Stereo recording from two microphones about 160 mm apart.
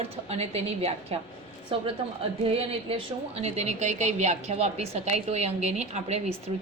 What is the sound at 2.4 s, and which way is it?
A woman's voice, 35° right (ahead or behind).